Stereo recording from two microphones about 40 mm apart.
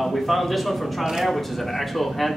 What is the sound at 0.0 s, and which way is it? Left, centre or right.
Speech, centre.